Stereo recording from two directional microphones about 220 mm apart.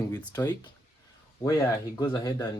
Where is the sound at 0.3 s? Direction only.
20° left (ahead or behind).